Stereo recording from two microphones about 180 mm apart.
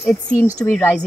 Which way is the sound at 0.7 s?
15° left (ahead or behind).